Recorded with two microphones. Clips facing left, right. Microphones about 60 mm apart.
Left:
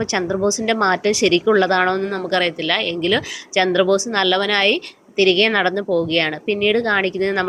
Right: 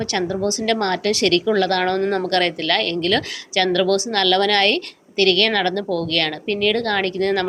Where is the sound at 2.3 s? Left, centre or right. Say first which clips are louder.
Even; centre.